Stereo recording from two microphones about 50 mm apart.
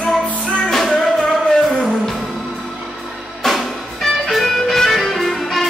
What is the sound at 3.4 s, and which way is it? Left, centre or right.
Music, centre.